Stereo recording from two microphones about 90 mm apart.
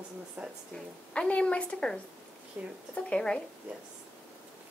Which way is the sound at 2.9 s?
10° left (ahead or behind).